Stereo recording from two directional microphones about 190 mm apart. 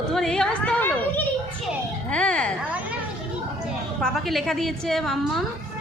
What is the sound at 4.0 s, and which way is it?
A woman's voice, centre (ahead or behind).